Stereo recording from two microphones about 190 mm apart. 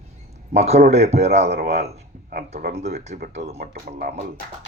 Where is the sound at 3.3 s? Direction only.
35° right (ahead or behind).